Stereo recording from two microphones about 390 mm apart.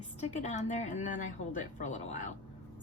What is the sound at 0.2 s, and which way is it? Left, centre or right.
A woman's voice, centre.